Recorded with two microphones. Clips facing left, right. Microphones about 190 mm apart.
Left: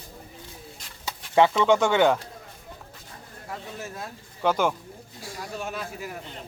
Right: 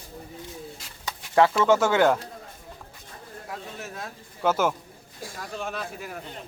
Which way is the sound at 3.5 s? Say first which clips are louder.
Left 2 dB; centre (ahead or behind).